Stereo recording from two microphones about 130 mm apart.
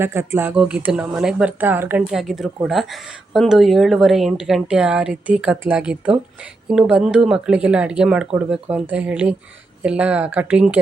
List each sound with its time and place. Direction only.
0.0 s speech: 20° right (ahead or behind)
0.5 s speech: 5° right (ahead or behind)